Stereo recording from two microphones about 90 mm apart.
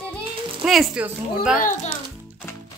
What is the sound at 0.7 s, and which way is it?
Speech, 5° right (ahead or behind).